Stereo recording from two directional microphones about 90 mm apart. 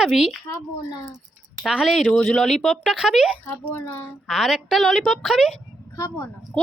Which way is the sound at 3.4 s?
25° left (ahead or behind).